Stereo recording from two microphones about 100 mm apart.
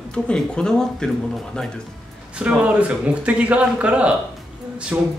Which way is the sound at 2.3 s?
10° right (ahead or behind).